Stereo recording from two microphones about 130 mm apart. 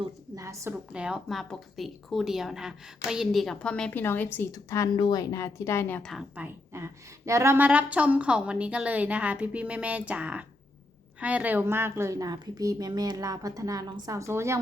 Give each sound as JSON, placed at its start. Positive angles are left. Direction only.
{"t": 0.3, "sound": "a woman's voice", "side_deg": -25}
{"t": 0.9, "sound": "a woman's voice", "side_deg": -5}
{"t": 4.9, "sound": "speech", "side_deg": 40}
{"t": 5.3, "sound": "speech", "side_deg": 25}
{"t": 6.0, "sound": "a woman's voice", "side_deg": 0}
{"t": 6.3, "sound": "a woman's voice", "side_deg": -15}